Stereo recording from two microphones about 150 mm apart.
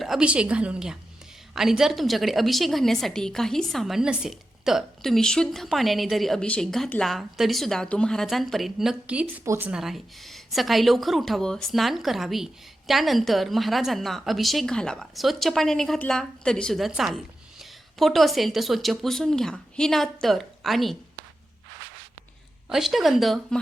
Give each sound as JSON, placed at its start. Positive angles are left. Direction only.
{"t": 0.0, "sound": "a woman's voice", "side_deg": -5}
{"t": 9.4, "sound": "a woman's voice", "side_deg": -20}
{"t": 9.6, "sound": "a woman's voice", "side_deg": -5}
{"t": 22.7, "sound": "a woman's voice", "side_deg": 0}